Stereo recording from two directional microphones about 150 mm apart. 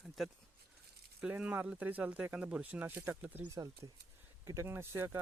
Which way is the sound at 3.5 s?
25° right (ahead or behind).